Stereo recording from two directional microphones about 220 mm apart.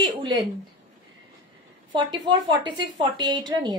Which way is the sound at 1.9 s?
20° right (ahead or behind).